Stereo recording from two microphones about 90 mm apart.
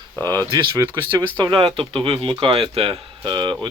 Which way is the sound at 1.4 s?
65° right (ahead or behind).